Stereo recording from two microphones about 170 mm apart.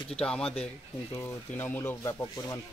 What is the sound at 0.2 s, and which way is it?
Speech, 5° left (ahead or behind).